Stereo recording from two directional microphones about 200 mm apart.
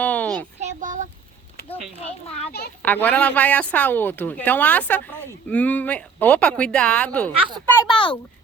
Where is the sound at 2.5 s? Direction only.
50° left (ahead or behind).